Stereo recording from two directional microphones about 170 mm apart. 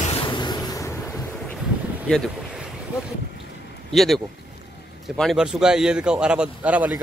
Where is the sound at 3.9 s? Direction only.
Centre (ahead or behind).